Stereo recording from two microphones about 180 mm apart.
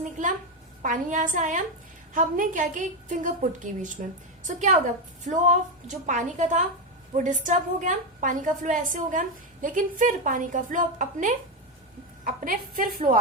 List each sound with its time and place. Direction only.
0.8 s a woman's voice: 45° right (ahead or behind)